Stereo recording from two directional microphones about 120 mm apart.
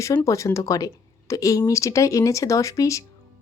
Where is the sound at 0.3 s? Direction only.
25° left (ahead or behind).